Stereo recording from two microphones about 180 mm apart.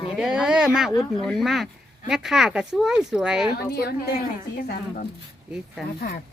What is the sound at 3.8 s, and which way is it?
A woman's voice, 60° left (ahead or behind).